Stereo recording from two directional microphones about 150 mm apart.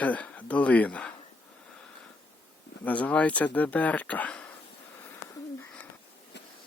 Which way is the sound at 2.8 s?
10° left (ahead or behind).